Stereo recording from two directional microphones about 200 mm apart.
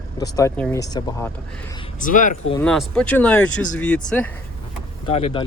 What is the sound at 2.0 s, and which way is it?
Speech, 40° left (ahead or behind).